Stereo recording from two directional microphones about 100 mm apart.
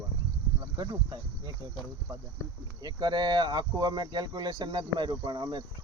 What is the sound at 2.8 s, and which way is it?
Speech, 45° right (ahead or behind).